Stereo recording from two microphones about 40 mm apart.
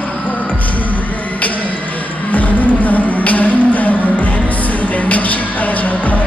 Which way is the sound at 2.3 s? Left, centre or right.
Left.